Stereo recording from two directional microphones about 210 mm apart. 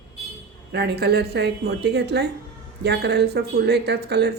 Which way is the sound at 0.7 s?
50° right (ahead or behind).